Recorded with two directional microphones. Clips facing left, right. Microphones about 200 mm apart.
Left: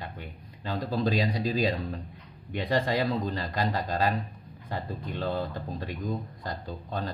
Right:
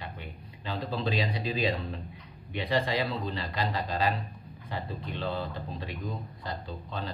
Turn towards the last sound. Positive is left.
turn(degrees=45)  # may be behind; listen again after turning